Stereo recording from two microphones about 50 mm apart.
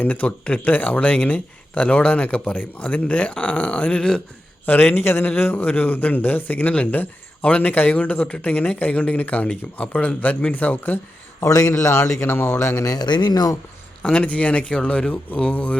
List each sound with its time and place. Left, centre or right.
0.0 s speech: left
4.6 s speech: left
7.7 s speech: left
11.8 s speech: left
12.2 s speech: left
14.0 s speech: left